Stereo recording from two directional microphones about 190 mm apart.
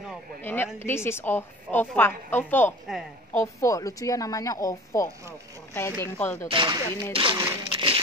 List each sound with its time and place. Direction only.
0.4 s a woman's voice: 10° left (ahead or behind)
6.5 s speech: 25° right (ahead or behind)